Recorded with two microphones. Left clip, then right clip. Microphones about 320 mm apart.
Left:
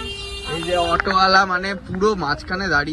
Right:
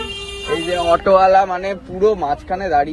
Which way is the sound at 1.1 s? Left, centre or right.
Centre.